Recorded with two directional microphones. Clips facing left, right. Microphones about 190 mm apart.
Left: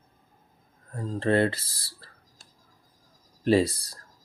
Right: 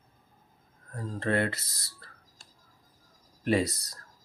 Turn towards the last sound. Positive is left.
turn(degrees=30)  # may be behind; listen again after turning